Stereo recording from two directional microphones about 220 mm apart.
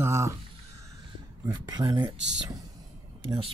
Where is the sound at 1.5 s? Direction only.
20° right (ahead or behind).